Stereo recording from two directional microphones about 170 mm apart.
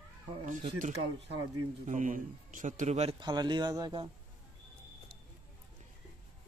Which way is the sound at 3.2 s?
25° right (ahead or behind).